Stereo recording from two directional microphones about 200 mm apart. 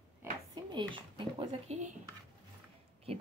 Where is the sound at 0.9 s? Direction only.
25° right (ahead or behind).